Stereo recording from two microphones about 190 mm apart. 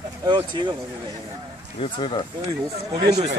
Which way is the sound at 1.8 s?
30° left (ahead or behind).